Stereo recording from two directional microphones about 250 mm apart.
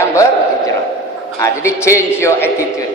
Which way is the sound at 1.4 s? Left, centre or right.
Centre.